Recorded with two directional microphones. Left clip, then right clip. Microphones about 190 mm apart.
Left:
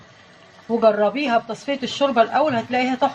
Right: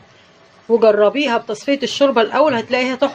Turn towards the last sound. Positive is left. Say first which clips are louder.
# right 3 dB
turn(degrees=-45)  # may be behind; listen again after turning